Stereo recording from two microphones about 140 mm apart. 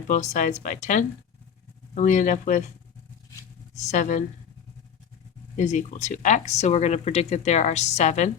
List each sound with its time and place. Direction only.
0.1 s speech: 60° left (ahead or behind)
3.8 s speech: 55° left (ahead or behind)
5.5 s speech: 55° left (ahead or behind)